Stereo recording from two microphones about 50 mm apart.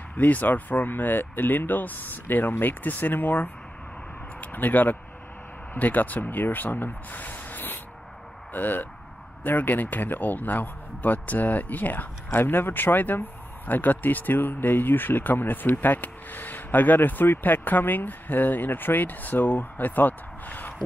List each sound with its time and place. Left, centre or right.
0.2 s speech: left